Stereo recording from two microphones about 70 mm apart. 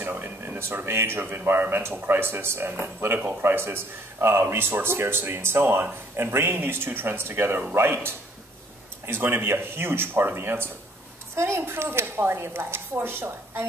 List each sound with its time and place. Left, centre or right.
0.0 s speech: right